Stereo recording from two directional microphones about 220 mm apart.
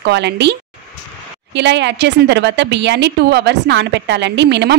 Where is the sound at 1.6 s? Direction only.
50° right (ahead or behind).